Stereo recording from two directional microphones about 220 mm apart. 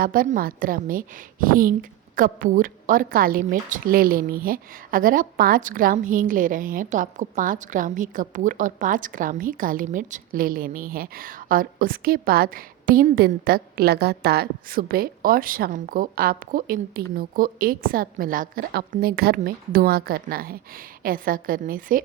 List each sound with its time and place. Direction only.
0.0 s a woman's voice: 40° right (ahead or behind)